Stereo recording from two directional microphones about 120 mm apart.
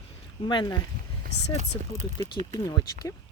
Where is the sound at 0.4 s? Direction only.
40° left (ahead or behind).